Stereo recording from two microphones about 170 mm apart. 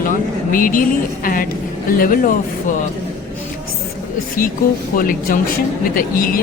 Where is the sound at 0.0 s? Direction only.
55° left (ahead or behind).